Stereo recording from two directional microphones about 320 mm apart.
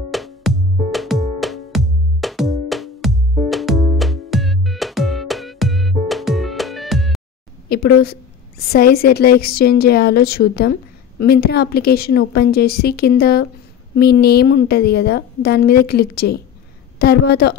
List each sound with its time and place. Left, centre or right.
0.1 s music: centre
7.7 s a woman's voice: left